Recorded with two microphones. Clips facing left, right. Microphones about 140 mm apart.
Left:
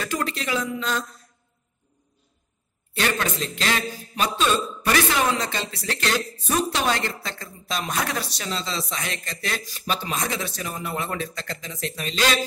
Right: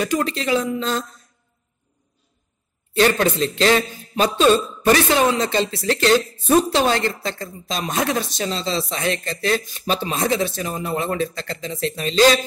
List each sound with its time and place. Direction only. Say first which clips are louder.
0.0 s speech: right 6 dB; 20° right (ahead or behind)
3.0 s a man's voice: right 8 dB; 30° right (ahead or behind)